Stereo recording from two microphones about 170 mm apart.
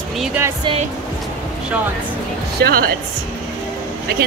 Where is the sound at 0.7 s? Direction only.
30° right (ahead or behind).